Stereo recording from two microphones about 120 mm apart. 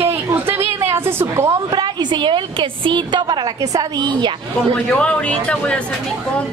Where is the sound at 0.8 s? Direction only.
20° right (ahead or behind).